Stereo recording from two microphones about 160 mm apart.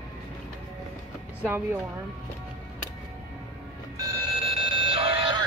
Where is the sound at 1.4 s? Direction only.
10° right (ahead or behind).